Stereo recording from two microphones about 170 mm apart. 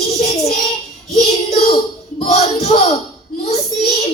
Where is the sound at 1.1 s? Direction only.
40° left (ahead or behind).